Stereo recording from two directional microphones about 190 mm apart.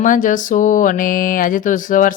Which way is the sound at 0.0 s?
45° left (ahead or behind).